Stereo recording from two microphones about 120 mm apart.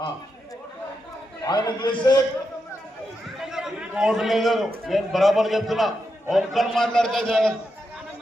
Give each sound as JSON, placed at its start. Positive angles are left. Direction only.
{"t": 1.5, "sound": "a man's voice", "side_deg": 35}
{"t": 3.4, "sound": "a man's voice", "side_deg": -5}